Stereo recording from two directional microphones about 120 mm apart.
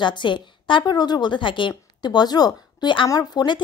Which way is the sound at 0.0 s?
40° left (ahead or behind).